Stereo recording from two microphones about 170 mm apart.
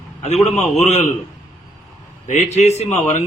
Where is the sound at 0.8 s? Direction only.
40° left (ahead or behind).